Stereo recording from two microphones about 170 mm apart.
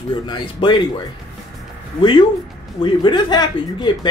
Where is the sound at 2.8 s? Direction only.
25° left (ahead or behind).